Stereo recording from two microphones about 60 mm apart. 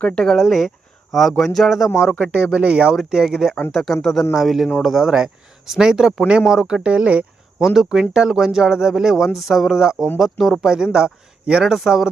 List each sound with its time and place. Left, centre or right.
0.0 s speech: centre
0.3 s speech: centre
2.1 s speech: centre
7.6 s speech: centre